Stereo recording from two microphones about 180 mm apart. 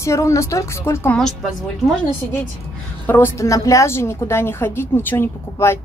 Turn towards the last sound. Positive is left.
turn(degrees=15)  # may be behind; listen again after turning